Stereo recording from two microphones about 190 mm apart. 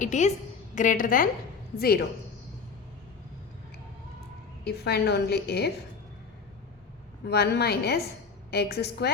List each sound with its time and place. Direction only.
0.0 s a woman's voice: 40° left (ahead or behind)
4.6 s a woman's voice: 60° left (ahead or behind)
7.3 s a woman's voice: 60° left (ahead or behind)